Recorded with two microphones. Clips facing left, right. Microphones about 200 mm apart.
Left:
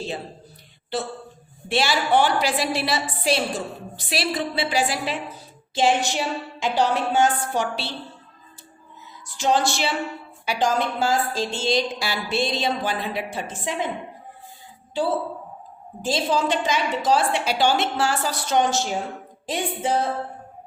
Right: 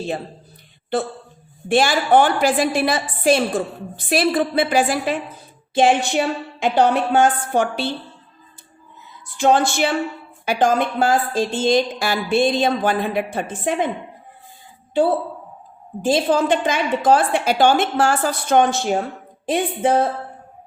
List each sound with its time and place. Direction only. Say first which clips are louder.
0.9 s a woman's voice: right 5 dB; 55° right (ahead or behind)
9.2 s a woman's voice: right 5 dB; 55° right (ahead or behind)
15.0 s a woman's voice: right 6 dB; 55° right (ahead or behind)